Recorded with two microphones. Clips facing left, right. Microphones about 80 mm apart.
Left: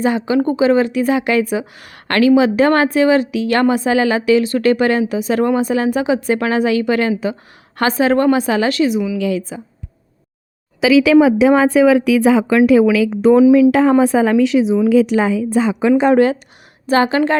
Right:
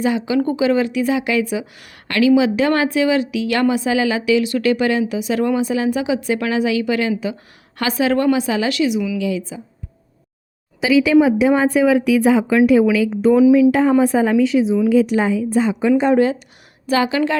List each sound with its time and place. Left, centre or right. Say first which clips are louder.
0.0 s a woman's voice: left 2 dB; left
9.1 s a woman's voice: left 3 dB; left
10.8 s speech: left 3 dB; left
13.4 s a woman's voice: left 1 dB; left
14.8 s speech: left 2 dB; left
16.0 s speech: left 4 dB; left
16.8 s a woman's voice: left 3 dB; left